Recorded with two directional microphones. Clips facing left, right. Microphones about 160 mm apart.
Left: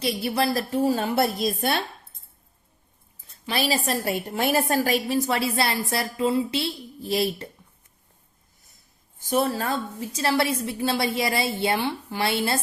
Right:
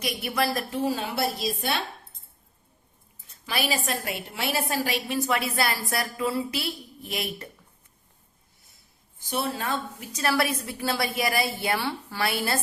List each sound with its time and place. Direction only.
0.0 s a woman's voice: 30° left (ahead or behind); by 1.8 s 50° left (ahead or behind)
3.4 s a woman's voice: 30° left (ahead or behind)
9.3 s a woman's voice: 40° left (ahead or behind); by 12.5 s 25° left (ahead or behind)